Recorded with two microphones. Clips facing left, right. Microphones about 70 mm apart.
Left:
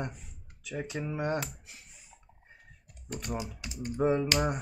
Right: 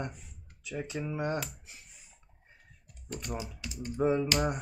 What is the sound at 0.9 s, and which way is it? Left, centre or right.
Speech, left.